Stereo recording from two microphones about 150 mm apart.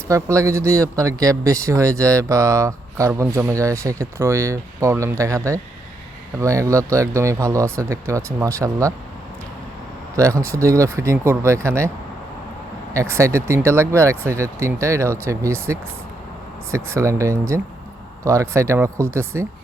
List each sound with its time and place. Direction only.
0.1 s speech: 20° right (ahead or behind)
10.2 s speech: 20° right (ahead or behind)
12.9 s speech: 20° right (ahead or behind)